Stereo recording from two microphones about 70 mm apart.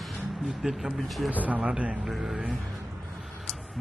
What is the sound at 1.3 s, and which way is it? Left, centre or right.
Speech, right.